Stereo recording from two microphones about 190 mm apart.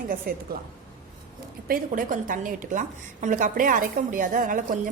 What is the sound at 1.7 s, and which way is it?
A woman's voice, 45° right (ahead or behind).